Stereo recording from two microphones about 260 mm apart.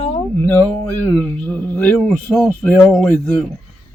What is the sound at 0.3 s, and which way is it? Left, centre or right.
Speech, centre.